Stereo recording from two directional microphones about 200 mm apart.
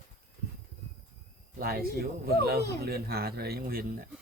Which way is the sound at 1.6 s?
50° right (ahead or behind).